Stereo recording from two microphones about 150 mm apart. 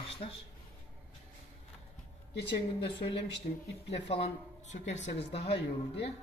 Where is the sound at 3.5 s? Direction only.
60° left (ahead or behind).